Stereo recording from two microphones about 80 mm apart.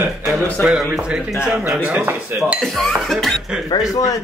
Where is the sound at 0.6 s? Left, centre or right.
Centre.